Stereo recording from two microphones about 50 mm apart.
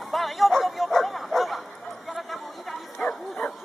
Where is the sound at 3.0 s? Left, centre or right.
Centre.